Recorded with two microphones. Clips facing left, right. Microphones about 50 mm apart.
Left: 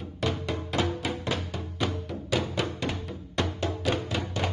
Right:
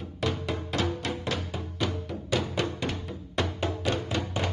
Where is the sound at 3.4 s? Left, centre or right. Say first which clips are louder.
Even; centre.